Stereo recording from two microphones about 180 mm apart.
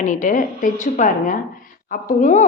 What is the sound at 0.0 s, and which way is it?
Speech, 45° left (ahead or behind).